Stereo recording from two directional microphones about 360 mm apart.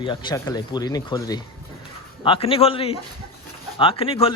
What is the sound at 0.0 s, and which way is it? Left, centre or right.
Speech, centre.